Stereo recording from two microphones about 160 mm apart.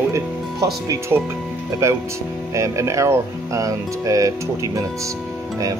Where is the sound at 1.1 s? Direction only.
20° right (ahead or behind).